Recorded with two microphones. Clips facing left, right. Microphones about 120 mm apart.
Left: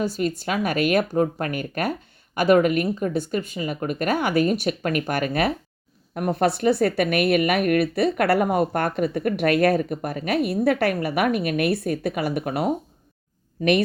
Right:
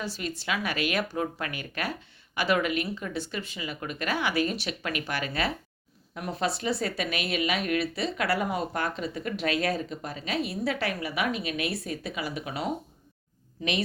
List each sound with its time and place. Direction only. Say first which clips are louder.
0.0 s speech: left 10 dB; 45° left (ahead or behind)